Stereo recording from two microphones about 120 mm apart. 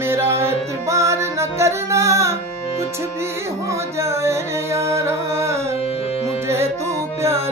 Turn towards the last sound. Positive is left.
turn(degrees=-25)  # may be behind; listen again after turning